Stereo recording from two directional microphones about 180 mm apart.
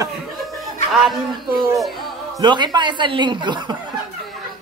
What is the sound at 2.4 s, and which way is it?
Speech, 25° right (ahead or behind).